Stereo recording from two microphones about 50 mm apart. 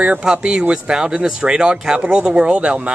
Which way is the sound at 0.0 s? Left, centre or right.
Centre.